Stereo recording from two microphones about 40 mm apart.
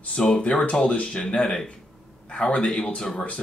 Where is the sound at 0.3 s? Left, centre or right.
Left.